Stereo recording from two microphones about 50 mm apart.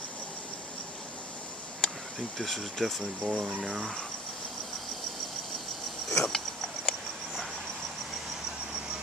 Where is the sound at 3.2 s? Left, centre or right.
Right.